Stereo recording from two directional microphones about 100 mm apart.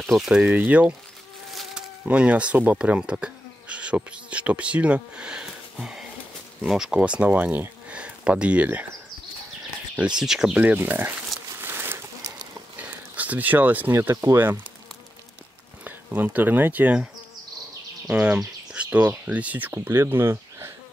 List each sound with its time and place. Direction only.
0.0 s speech: 5° right (ahead or behind)
1.5 s speech: 5° right (ahead or behind)
9.9 s speech: 10° right (ahead or behind)
11.6 s a sound: 25° right (ahead or behind)
13.1 s speech: 15° right (ahead or behind)
15.8 s speech: 15° right (ahead or behind)